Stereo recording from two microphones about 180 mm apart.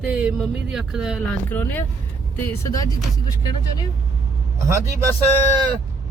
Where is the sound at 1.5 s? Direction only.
10° left (ahead or behind).